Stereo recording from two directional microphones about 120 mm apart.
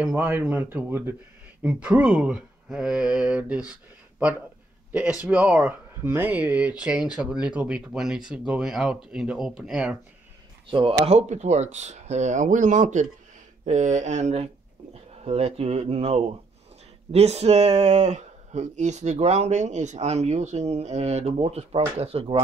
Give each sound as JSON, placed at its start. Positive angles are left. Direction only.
{"t": 0.0, "sound": "speech", "side_deg": -15}
{"t": 5.2, "sound": "speech", "side_deg": -10}
{"t": 6.0, "sound": "speech", "side_deg": -15}
{"t": 10.7, "sound": "speech", "side_deg": -50}
{"t": 11.1, "sound": "speech", "side_deg": -70}